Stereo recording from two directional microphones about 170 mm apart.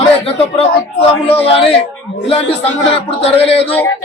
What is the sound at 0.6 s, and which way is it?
A man's voice, 35° left (ahead or behind).